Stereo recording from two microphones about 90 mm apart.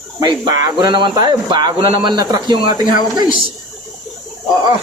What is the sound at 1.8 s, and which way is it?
Speech, 90° right.